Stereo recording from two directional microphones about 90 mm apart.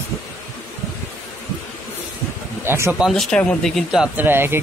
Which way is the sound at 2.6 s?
25° right (ahead or behind).